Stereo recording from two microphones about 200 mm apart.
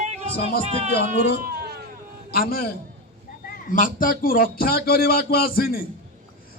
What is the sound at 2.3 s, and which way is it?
A man's voice, 50° left (ahead or behind).